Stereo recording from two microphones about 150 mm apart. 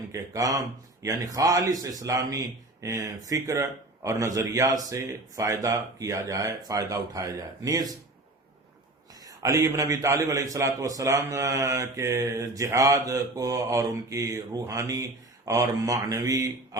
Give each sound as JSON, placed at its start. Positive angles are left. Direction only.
{"t": 0.1, "sound": "a man's voice", "side_deg": -20}
{"t": 9.2, "sound": "a man's voice", "side_deg": -20}